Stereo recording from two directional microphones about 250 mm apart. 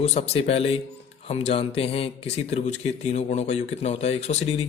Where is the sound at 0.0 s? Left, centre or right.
Left.